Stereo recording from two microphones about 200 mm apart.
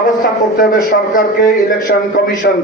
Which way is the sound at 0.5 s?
45° left (ahead or behind).